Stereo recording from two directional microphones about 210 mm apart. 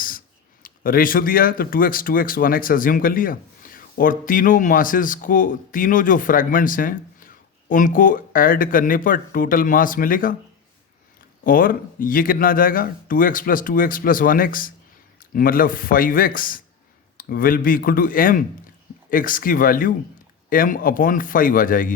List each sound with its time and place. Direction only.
0.6 s speech: 45° left (ahead or behind)
11.4 s speech: 40° left (ahead or behind)